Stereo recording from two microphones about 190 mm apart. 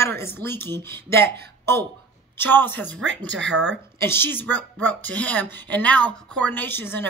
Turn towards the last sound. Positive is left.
turn(degrees=10)  # may be behind; listen again after turning